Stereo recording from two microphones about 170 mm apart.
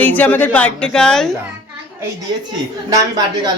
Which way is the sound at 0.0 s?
10° left (ahead or behind).